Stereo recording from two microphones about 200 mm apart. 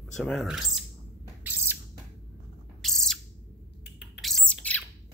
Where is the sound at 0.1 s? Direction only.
Centre (ahead or behind).